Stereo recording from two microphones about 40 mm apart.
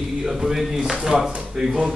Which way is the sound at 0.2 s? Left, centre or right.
Centre.